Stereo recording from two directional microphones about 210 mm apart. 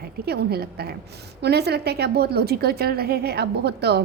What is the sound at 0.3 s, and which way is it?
A woman's voice, 50° right (ahead or behind).